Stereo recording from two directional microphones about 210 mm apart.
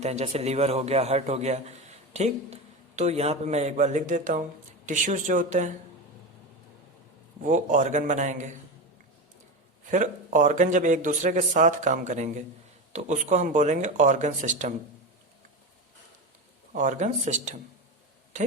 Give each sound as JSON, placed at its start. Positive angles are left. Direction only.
{"t": 0.0, "sound": "a man's voice", "side_deg": -30}
{"t": 7.4, "sound": "a man's voice", "side_deg": -35}
{"t": 9.8, "sound": "a man's voice", "side_deg": -35}
{"t": 16.7, "sound": "a man's voice", "side_deg": -35}